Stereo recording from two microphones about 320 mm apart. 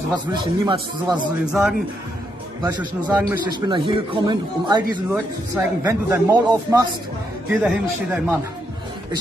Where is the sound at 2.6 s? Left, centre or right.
Centre.